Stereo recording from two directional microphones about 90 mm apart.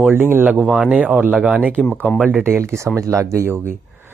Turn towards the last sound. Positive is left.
turn(degrees=-30)  # may be behind; listen again after turning